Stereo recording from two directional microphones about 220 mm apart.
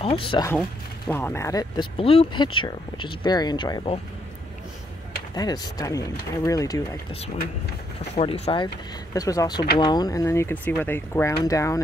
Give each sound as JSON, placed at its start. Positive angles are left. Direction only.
{"t": 0.0, "sound": "speech", "side_deg": 25}
{"t": 0.6, "sound": "speech", "side_deg": 5}
{"t": 5.3, "sound": "speech", "side_deg": 20}
{"t": 8.2, "sound": "speech", "side_deg": 25}